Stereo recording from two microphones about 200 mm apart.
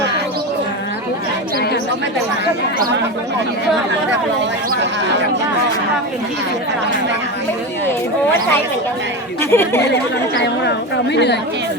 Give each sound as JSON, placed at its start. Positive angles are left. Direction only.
{"t": 9.4, "sound": "speech", "side_deg": 10}
{"t": 11.1, "sound": "a woman's voice", "side_deg": 60}